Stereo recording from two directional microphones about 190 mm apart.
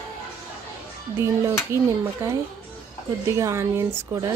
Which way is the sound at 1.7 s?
15° right (ahead or behind).